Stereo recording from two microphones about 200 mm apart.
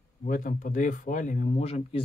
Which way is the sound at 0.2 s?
40° left (ahead or behind).